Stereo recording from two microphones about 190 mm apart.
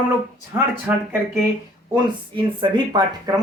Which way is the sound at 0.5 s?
15° right (ahead or behind).